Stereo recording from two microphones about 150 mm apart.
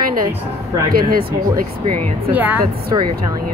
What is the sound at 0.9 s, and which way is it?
Speech, 80° right.